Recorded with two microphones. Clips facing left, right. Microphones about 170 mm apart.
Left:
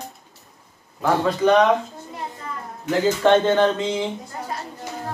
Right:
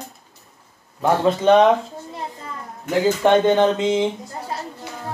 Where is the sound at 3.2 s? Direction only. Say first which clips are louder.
Right 1 dB; 15° right (ahead or behind).